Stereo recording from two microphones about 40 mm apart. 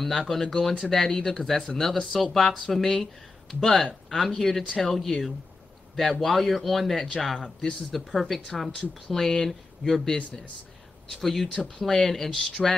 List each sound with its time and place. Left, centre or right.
0.0 s speech: centre
10.0 s speech: left
11.1 s speech: centre